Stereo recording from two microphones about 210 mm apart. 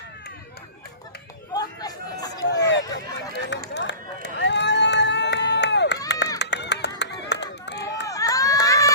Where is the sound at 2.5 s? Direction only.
55° left (ahead or behind).